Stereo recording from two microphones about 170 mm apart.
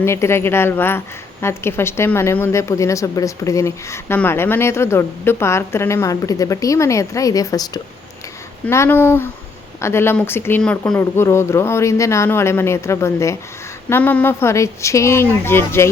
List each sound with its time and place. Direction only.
0.0 s speech: 15° left (ahead or behind)